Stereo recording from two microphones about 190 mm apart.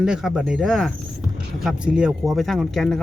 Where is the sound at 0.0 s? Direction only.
5° right (ahead or behind).